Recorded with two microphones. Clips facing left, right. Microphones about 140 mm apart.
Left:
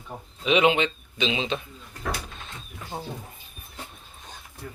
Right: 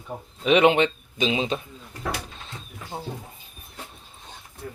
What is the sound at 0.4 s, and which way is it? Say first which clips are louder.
Speech: right 3 dB; 50° right (ahead or behind).